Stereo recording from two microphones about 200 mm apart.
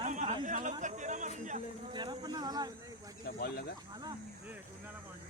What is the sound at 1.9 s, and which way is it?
Speech, 20° right (ahead or behind).